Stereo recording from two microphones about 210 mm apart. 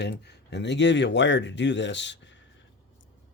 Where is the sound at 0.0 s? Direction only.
55° left (ahead or behind).